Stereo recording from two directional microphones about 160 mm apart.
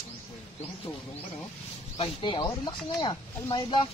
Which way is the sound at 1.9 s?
35° left (ahead or behind).